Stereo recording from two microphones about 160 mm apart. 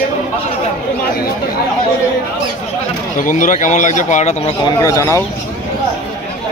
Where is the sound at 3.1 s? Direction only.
55° left (ahead or behind).